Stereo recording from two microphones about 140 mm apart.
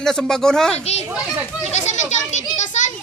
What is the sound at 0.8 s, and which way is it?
Children playing, 50° left (ahead or behind).